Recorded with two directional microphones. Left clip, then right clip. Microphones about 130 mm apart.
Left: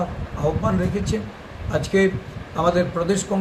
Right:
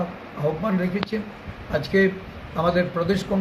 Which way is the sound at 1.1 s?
10° left (ahead or behind).